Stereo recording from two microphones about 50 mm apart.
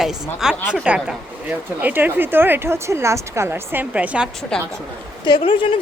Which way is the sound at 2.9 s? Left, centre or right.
Right.